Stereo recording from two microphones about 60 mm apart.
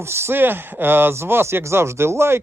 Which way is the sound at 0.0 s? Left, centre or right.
Right.